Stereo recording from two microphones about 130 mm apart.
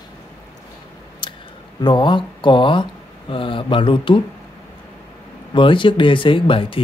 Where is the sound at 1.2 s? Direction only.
40° left (ahead or behind).